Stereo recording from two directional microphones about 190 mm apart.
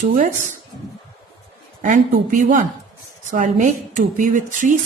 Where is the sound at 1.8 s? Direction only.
40° right (ahead or behind).